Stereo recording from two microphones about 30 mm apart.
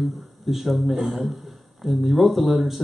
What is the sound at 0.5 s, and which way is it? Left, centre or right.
Speech, centre.